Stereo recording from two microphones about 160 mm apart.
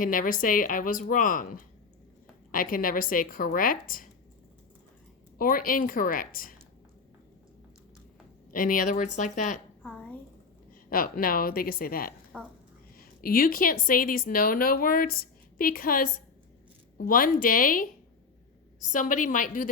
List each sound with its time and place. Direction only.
0.0 s a woman's voice: 60° left (ahead or behind)
5.4 s a woman's voice: 60° left (ahead or behind)
8.4 s a woman's voice: 60° left (ahead or behind)
9.8 s a sound: 10° left (ahead or behind)
10.7 s a woman's voice: 65° left (ahead or behind)
12.3 s speech: 5° left (ahead or behind)
13.0 s a woman's voice: 65° left (ahead or behind)